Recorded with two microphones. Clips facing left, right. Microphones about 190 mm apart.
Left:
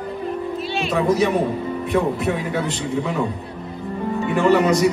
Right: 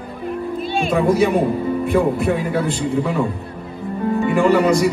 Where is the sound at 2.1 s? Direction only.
55° right (ahead or behind).